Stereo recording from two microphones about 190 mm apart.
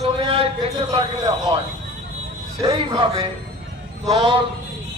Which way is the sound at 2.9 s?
25° right (ahead or behind).